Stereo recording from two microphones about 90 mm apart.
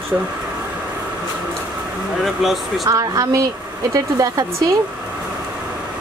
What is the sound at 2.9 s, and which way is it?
Speech, 40° right (ahead or behind).